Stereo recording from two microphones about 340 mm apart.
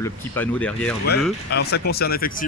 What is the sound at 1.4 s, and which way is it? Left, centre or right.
Speech, left.